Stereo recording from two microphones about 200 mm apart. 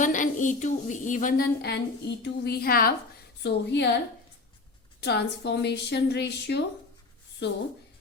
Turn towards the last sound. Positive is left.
turn(degrees=55)  # may be behind; listen again after turning